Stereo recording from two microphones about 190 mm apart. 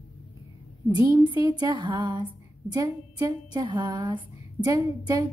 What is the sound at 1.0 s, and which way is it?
A woman's voice, 20° right (ahead or behind).